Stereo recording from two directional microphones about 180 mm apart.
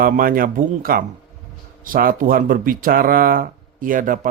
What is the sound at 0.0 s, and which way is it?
Speech, 50° right (ahead or behind).